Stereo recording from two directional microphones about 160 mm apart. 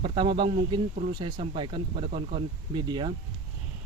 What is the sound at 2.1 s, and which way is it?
Speech, 40° right (ahead or behind).